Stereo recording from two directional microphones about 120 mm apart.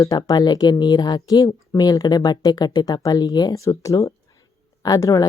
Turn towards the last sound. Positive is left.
turn(degrees=30)  # may be behind; listen again after turning